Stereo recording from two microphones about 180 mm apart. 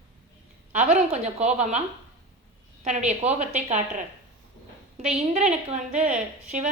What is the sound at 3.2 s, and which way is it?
Speech, 40° right (ahead or behind).